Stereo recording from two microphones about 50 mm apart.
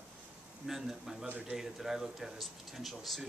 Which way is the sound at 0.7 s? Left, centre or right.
Centre.